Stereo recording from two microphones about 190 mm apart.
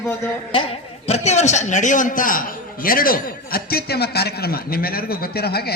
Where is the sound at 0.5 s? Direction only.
30° left (ahead or behind).